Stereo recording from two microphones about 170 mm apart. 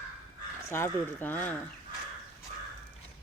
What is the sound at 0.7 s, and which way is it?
Speech, 10° left (ahead or behind).